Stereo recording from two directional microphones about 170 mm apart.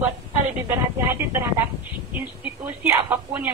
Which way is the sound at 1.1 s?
15° right (ahead or behind).